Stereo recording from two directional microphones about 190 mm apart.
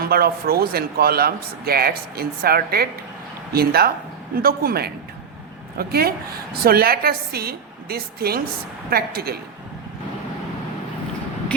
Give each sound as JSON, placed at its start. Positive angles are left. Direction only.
{"t": 0.0, "sound": "speech", "side_deg": -55}